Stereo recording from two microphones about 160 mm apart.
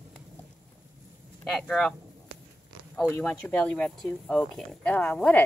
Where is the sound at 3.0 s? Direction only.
10° left (ahead or behind).